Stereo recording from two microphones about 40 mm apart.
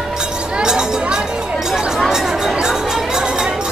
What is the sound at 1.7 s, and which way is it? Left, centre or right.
Chatter, centre.